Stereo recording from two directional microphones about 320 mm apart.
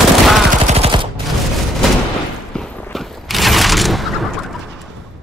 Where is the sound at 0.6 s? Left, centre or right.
Centre.